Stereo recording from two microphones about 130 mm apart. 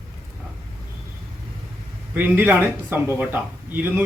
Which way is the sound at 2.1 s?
15° right (ahead or behind).